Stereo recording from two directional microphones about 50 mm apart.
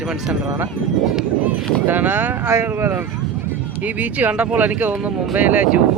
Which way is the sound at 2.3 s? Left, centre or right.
Right.